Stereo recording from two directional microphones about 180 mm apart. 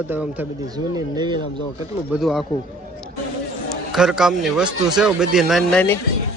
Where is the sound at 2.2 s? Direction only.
Centre (ahead or behind).